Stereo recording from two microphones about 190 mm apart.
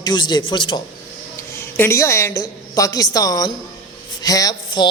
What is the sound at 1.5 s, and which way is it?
A woman's voice, 15° left (ahead or behind).